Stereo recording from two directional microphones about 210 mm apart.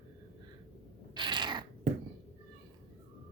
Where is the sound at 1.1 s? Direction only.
20° right (ahead or behind).